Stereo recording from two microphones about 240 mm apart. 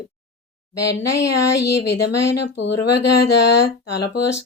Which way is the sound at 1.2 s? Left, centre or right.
Left.